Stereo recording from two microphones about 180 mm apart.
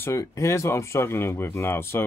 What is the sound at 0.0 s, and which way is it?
Speech, 15° left (ahead or behind).